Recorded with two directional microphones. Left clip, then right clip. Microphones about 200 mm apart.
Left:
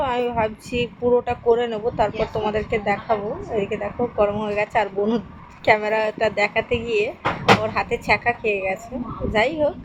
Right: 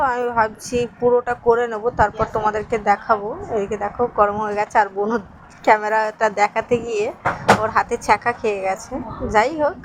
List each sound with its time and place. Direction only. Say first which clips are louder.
0.0 s speech: right 3 dB; 10° right (ahead or behind)
6.7 s speech: even; 60° right (ahead or behind)
7.6 s speech: right 4 dB; 15° right (ahead or behind)